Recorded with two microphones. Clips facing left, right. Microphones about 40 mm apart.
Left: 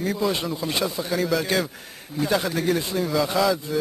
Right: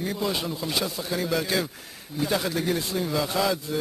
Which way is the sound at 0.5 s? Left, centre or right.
Centre.